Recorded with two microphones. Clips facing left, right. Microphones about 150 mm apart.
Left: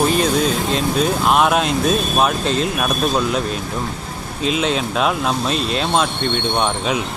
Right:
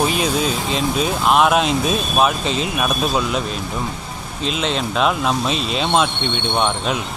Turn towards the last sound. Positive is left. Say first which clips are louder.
# left 1 dB
turn(degrees=0)  # may be behind; listen again after turning